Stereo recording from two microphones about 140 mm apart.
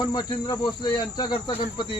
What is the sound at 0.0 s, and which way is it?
Cricket, 35° left (ahead or behind).